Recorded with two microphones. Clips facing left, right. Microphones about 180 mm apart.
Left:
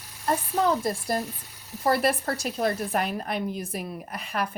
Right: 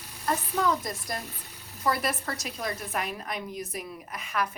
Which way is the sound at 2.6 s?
60° left (ahead or behind).